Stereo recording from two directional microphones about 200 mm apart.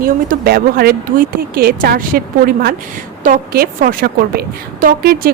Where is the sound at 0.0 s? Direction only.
50° right (ahead or behind).